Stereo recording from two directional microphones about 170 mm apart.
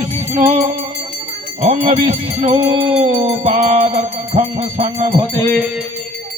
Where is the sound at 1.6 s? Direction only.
45° right (ahead or behind).